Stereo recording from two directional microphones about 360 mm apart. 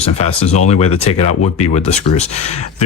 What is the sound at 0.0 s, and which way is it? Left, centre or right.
Speech, centre.